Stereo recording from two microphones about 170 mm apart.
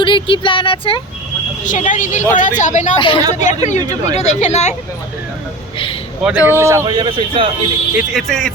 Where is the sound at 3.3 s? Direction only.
45° left (ahead or behind).